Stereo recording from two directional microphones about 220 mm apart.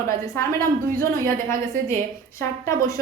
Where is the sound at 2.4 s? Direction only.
10° left (ahead or behind).